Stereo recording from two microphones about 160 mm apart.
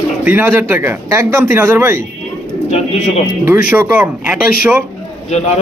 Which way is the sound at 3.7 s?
10° right (ahead or behind).